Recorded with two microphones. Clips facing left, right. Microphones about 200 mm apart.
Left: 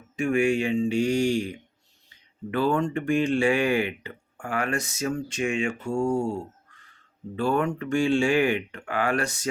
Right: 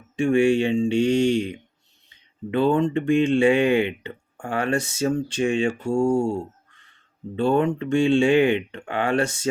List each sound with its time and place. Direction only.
0.2 s speech: 30° right (ahead or behind)